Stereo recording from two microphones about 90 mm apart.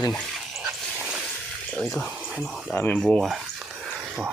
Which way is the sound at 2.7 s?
15° left (ahead or behind).